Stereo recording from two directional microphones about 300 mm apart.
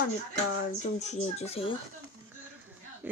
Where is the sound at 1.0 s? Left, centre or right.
Left.